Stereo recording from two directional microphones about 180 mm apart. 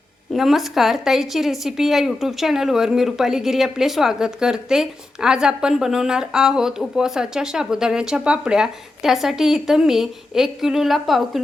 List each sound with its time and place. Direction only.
0.3 s a woman's voice: centre (ahead or behind)